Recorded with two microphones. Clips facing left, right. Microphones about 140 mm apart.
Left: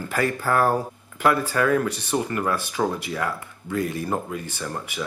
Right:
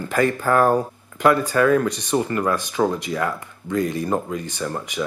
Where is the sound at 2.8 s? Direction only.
10° right (ahead or behind).